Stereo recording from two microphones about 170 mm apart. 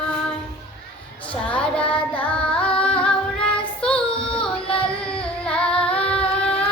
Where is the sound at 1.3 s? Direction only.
5° left (ahead or behind).